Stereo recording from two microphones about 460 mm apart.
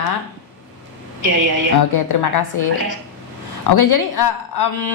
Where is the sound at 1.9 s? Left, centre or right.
Left.